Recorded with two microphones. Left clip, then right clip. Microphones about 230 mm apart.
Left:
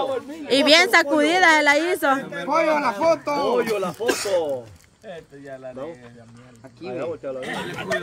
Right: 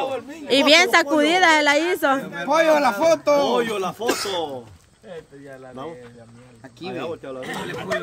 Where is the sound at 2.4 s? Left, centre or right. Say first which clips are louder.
Right 3 dB; right.